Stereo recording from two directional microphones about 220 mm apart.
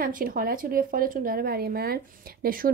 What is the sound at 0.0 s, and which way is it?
Speech, 40° right (ahead or behind).